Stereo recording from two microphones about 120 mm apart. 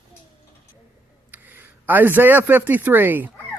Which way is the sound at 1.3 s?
15° right (ahead or behind).